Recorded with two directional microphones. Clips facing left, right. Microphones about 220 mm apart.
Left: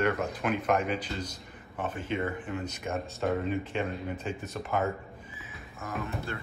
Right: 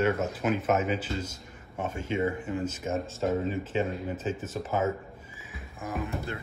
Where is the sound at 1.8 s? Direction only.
45° right (ahead or behind).